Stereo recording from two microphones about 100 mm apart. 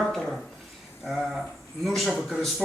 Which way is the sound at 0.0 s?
Centre (ahead or behind).